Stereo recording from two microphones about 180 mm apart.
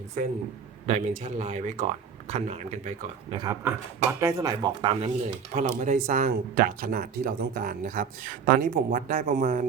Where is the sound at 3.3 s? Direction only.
20° right (ahead or behind); by 9.6 s 45° right (ahead or behind).